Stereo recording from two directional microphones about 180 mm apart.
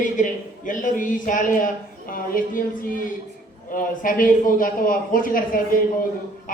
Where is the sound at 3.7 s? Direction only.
50° left (ahead or behind).